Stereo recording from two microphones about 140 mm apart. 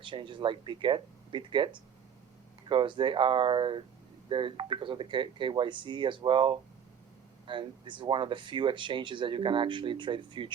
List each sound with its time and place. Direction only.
0.0 s speech: 35° right (ahead or behind)